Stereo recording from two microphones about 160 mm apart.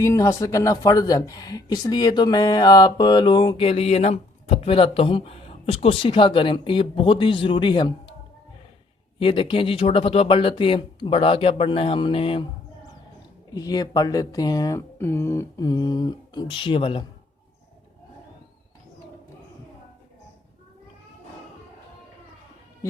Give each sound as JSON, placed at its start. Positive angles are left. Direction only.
{"t": 0.0, "sound": "speech", "side_deg": 20}
{"t": 9.1, "sound": "speech", "side_deg": 30}
{"t": 13.5, "sound": "speech", "side_deg": 25}